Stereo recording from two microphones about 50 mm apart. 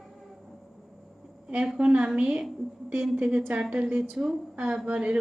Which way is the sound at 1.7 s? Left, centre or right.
Right.